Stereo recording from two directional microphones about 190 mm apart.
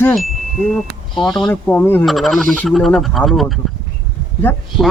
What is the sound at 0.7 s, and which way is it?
Speech, centre (ahead or behind).